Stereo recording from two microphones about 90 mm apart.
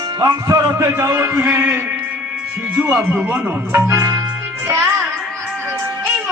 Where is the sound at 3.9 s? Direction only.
35° right (ahead or behind).